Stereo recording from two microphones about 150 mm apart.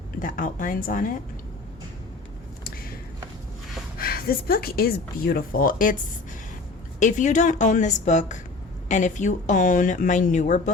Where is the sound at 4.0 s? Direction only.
85° left.